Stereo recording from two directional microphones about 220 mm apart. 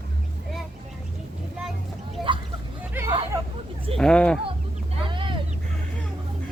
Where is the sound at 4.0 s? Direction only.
5° left (ahead or behind).